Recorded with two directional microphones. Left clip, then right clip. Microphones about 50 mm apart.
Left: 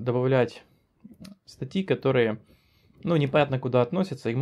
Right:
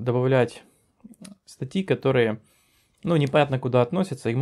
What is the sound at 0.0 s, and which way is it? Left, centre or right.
Speech, right.